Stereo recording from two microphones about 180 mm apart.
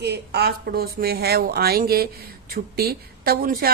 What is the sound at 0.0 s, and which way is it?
Speech, 65° right (ahead or behind).